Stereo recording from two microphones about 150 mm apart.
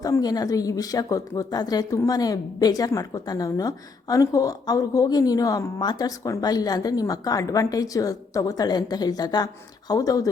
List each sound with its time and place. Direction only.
0.0 s a woman's voice: 25° left (ahead or behind)